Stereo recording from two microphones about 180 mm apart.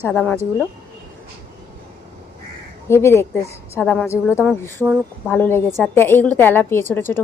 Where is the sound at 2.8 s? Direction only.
15° left (ahead or behind).